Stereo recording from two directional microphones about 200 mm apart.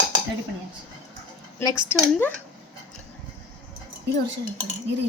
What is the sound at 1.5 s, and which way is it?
Speech, 15° left (ahead or behind).